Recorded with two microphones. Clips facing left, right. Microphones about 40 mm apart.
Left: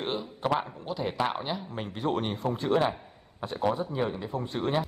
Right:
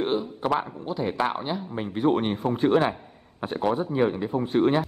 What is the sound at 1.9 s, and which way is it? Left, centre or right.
A man's voice, centre.